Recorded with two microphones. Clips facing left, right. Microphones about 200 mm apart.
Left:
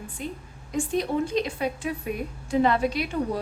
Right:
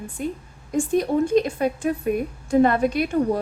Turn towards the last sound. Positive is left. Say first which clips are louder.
# right 4 dB
turn(degrees=-50)  # may be behind; listen again after turning